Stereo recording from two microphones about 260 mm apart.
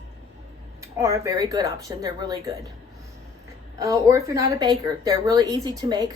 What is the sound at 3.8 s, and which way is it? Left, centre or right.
Speech, centre.